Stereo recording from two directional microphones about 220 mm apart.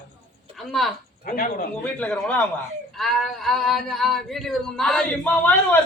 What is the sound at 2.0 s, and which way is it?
A man's voice, 5° left (ahead or behind).